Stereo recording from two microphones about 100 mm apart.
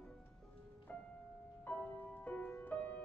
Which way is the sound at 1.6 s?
15° left (ahead or behind).